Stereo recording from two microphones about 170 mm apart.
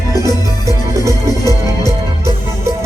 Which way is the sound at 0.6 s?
20° right (ahead or behind).